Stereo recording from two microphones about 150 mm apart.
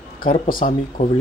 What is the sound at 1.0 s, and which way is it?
Speech, 55° left (ahead or behind).